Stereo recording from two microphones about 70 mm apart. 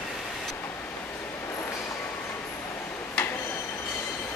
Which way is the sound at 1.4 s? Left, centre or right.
Left.